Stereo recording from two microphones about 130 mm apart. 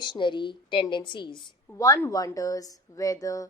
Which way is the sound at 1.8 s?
25° left (ahead or behind).